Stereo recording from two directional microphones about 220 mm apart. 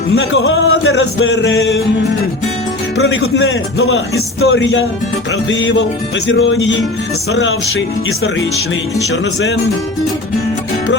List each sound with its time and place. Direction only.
0.2 s speech: 55° left (ahead or behind)
3.0 s a man's voice: 50° left (ahead or behind)